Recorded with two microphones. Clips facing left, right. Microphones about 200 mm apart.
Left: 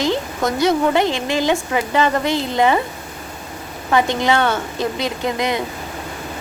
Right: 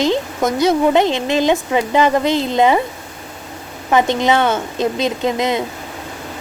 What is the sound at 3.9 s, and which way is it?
A woman's voice, 20° right (ahead or behind).